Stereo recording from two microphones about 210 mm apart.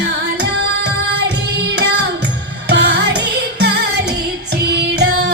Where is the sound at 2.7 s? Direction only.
55° right (ahead or behind).